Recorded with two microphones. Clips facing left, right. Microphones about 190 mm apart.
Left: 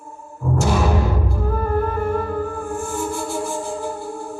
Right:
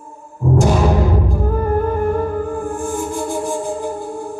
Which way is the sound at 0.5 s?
15° right (ahead or behind).